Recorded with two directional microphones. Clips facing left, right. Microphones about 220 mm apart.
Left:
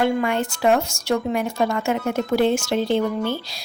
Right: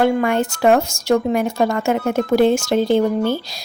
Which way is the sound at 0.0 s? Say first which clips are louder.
Right 4 dB; 50° right (ahead or behind).